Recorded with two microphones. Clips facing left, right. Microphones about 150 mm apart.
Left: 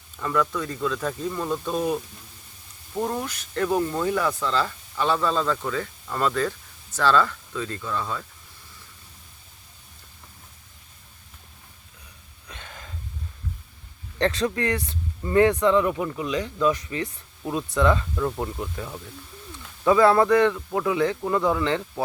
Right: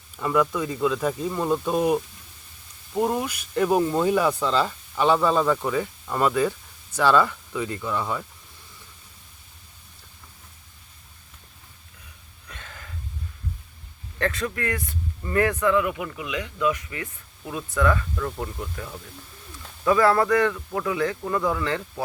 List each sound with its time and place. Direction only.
0.2 s speech: 15° right (ahead or behind)
12.5 s a sound: 20° left (ahead or behind)
14.2 s speech: 25° left (ahead or behind)
19.8 s a man's voice: 20° left (ahead or behind)